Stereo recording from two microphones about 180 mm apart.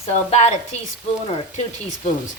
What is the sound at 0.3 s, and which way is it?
Speech, 35° left (ahead or behind).